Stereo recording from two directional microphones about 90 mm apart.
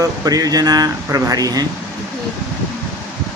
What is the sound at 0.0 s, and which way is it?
Speech, 45° right (ahead or behind).